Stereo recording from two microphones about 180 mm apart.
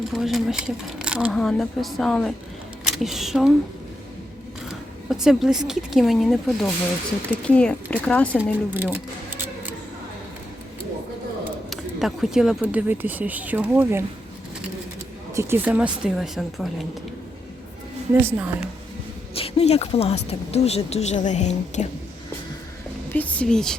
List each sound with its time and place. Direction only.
0.1 s speech: centre (ahead or behind)
5.0 s speech: 5° right (ahead or behind)
8.7 s speech: 10° right (ahead or behind)
11.7 s speech: centre (ahead or behind)
15.4 s speech: 10° right (ahead or behind)
18.2 s speech: 10° right (ahead or behind)
19.3 s a woman's voice: 35° left (ahead or behind)
23.1 s speech: 10° left (ahead or behind)